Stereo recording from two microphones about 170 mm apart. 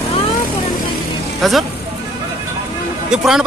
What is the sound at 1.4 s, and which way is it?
Speech, centre (ahead or behind).